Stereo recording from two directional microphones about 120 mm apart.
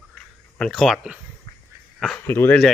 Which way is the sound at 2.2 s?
20° left (ahead or behind).